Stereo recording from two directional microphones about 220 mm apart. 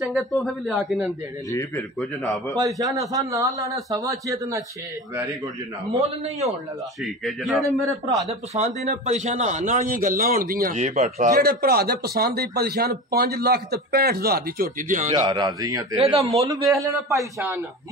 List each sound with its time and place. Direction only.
0.0 s a man's voice: centre (ahead or behind)
1.5 s a man's voice: 15° left (ahead or behind)
2.0 s a man's voice: centre (ahead or behind)
2.6 s a man's voice: 15° right (ahead or behind)
7.0 s a man's voice: centre (ahead or behind)
8.5 s a man's voice: 30° right (ahead or behind)
15.2 s speech: 20° right (ahead or behind)
16.3 s a man's voice: 15° right (ahead or behind)